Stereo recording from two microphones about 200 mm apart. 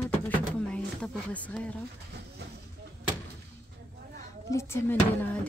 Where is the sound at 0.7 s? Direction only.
5° left (ahead or behind).